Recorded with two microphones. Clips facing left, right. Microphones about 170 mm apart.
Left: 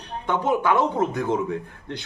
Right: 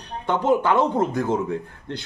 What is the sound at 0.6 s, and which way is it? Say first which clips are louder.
Speech: right 1 dB; 10° right (ahead or behind).